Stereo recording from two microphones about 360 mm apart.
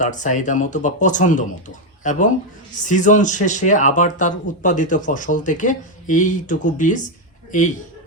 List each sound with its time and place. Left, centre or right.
0.0 s speech: left